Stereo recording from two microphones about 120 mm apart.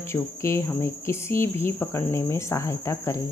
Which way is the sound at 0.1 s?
25° left (ahead or behind).